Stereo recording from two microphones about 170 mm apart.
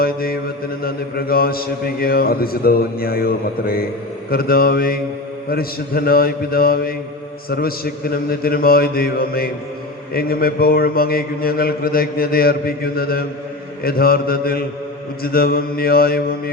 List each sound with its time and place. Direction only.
0.0 s mantra: 60° left (ahead or behind)
8.1 s mantra: 60° left (ahead or behind)